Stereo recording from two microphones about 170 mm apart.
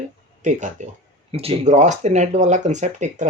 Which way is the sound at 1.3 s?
35° right (ahead or behind).